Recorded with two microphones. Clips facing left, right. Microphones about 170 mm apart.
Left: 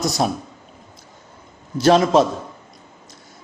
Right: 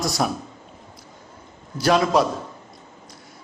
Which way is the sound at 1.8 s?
25° left (ahead or behind).